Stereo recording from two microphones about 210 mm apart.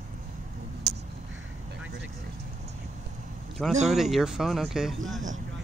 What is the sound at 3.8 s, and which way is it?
Speech, centre (ahead or behind).